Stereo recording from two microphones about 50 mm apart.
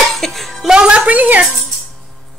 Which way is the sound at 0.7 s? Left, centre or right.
Centre.